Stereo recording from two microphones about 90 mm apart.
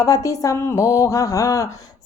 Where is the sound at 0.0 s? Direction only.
40° left (ahead or behind).